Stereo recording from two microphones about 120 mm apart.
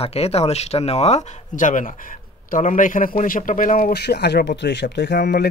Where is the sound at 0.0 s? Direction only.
60° left (ahead or behind); by 3.7 s 90° left.